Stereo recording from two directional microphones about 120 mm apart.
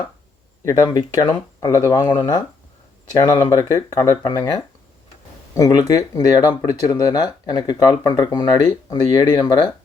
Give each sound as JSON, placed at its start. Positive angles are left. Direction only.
{"t": 0.6, "sound": "speech", "side_deg": 30}
{"t": 2.0, "sound": "speech", "side_deg": 40}
{"t": 3.6, "sound": "speech", "side_deg": 25}